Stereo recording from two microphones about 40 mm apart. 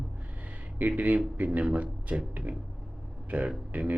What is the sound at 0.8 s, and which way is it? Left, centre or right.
Speech, right.